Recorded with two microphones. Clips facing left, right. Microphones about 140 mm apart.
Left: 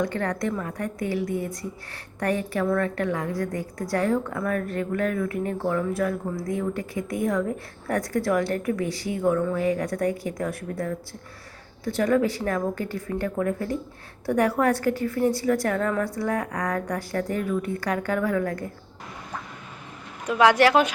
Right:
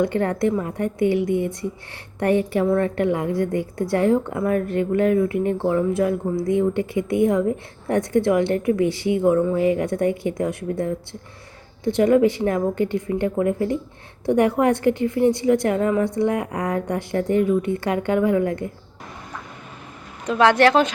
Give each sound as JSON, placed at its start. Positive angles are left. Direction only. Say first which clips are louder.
{"t": 0.0, "sound": "a woman's voice", "louder": "right 6 dB", "side_deg": -25}
{"t": 20.2, "sound": "speech", "louder": "right 2 dB", "side_deg": 10}